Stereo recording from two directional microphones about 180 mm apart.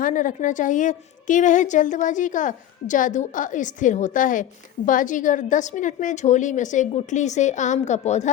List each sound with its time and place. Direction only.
0.0 s a woman's voice: 45° left (ahead or behind)